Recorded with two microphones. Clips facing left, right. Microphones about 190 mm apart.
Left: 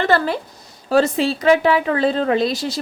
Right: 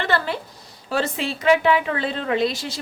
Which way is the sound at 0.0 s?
40° left (ahead or behind).